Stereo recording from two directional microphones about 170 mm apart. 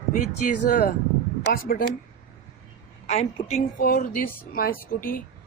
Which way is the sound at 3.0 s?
40° left (ahead or behind).